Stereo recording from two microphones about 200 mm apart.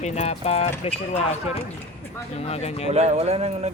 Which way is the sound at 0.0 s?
35° left (ahead or behind).